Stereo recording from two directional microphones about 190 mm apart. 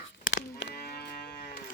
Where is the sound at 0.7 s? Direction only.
55° left (ahead or behind).